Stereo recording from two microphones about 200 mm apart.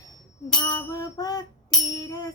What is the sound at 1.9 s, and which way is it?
Music, 20° left (ahead or behind).